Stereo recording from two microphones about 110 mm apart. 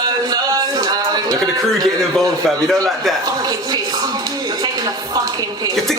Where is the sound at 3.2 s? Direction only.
35° right (ahead or behind).